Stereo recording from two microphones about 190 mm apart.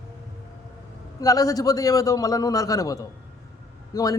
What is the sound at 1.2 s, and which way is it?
Speech, 20° left (ahead or behind).